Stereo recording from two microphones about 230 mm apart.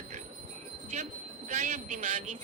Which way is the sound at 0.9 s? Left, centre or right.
Right.